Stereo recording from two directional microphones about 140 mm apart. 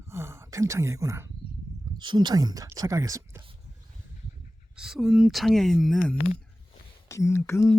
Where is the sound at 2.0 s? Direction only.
30° right (ahead or behind).